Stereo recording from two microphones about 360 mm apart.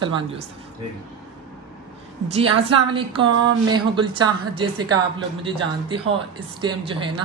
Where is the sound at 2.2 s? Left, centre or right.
Centre.